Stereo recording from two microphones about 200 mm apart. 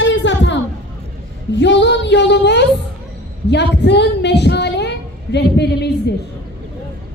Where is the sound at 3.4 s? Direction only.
60° left (ahead or behind).